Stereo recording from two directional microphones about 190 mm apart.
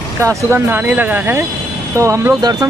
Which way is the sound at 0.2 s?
15° right (ahead or behind).